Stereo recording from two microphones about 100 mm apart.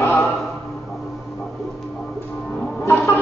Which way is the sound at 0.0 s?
25° left (ahead or behind).